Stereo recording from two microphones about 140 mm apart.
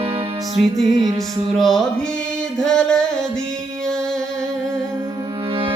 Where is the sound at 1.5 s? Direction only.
Centre (ahead or behind).